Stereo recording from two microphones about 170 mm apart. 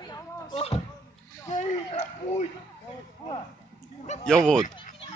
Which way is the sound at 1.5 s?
40° left (ahead or behind).